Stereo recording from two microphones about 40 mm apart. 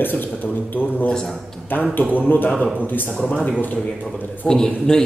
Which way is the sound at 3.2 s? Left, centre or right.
Left.